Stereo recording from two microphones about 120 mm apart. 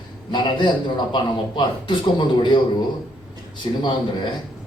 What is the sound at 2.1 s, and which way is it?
Speech, 40° left (ahead or behind).